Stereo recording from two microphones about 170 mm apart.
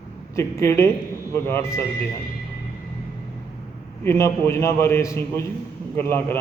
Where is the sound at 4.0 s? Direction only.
15° left (ahead or behind).